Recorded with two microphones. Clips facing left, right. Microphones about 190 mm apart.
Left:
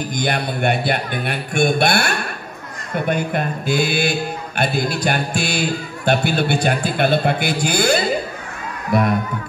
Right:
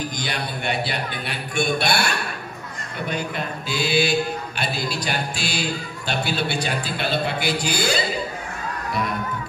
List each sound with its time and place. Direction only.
0.1 s a man's voice: 55° left (ahead or behind)